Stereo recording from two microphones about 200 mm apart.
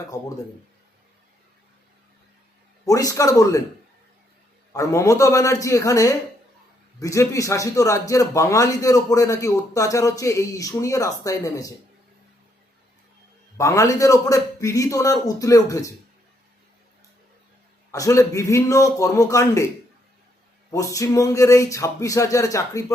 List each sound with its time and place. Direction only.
2.8 s a man's voice: 15° left (ahead or behind)
4.7 s a man's voice: 15° left (ahead or behind)
13.6 s a man's voice: 15° left (ahead or behind)
17.9 s a man's voice: 15° left (ahead or behind)
20.7 s a man's voice: 15° left (ahead or behind)